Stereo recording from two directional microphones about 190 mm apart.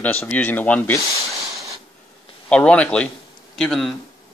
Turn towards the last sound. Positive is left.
turn(degrees=0)  # may be behind; listen again after turning